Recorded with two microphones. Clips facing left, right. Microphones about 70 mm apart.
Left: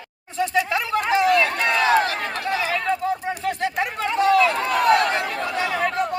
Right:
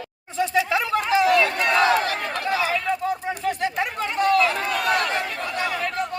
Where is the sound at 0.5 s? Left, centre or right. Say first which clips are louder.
Right 1 dB; centre.